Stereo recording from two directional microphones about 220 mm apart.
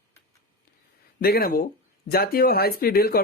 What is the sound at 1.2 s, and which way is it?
Speech, 45° left (ahead or behind).